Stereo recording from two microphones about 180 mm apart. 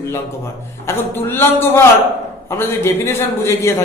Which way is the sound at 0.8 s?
10° left (ahead or behind).